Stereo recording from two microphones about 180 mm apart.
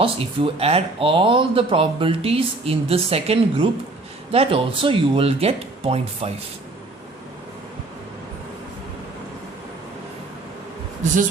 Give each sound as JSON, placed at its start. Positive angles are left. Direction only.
{"t": 0.0, "sound": "speech", "side_deg": -35}